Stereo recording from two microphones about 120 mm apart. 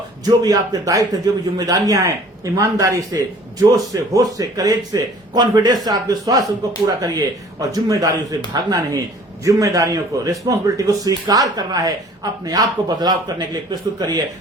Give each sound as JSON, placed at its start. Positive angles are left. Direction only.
{"t": 0.3, "sound": "a man's voice", "side_deg": -30}